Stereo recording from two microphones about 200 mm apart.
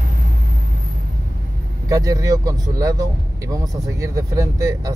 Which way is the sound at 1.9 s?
15° right (ahead or behind).